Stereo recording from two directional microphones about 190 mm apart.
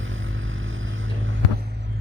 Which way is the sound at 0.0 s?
90° right.